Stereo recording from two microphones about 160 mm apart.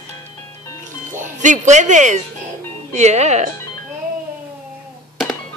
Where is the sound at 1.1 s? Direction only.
55° right (ahead or behind).